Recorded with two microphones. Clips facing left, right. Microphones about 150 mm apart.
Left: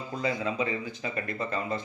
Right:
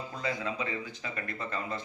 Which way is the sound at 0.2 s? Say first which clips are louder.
Left 5 dB; 15° left (ahead or behind).